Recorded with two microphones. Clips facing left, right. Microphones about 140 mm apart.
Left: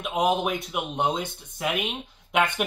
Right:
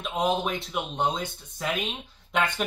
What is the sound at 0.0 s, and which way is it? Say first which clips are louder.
Speech: left 2 dB; 15° left (ahead or behind).